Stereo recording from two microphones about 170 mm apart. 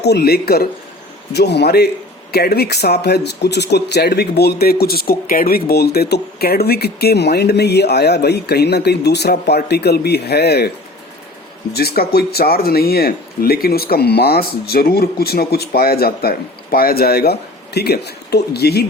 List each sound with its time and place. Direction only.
0.0 s speech: 75° left (ahead or behind)
11.7 s speech: 65° left (ahead or behind)